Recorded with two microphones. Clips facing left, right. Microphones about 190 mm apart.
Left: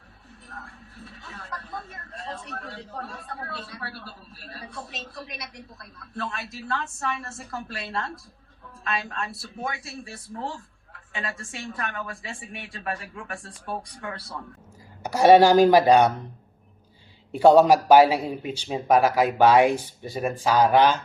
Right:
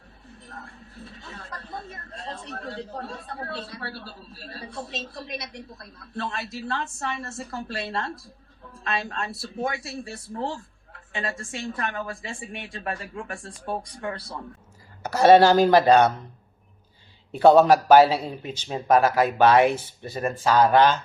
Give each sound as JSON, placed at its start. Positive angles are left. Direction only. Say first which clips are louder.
{"t": 1.3, "sound": "a woman's voice", "louder": "left 1 dB", "side_deg": -30}
{"t": 15.0, "sound": "a man's voice", "louder": "even", "side_deg": 15}
{"t": 17.3, "sound": "a man's voice", "louder": "even", "side_deg": 15}